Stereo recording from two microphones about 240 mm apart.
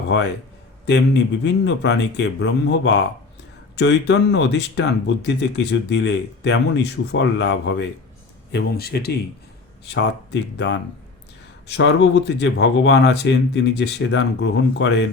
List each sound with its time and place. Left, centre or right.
0.1 s speech: left
11.8 s speech: left